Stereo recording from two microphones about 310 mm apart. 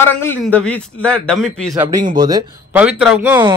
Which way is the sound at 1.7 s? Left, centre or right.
Centre.